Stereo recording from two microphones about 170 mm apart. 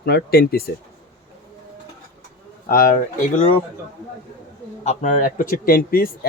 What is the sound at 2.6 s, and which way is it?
Speech, 55° left (ahead or behind).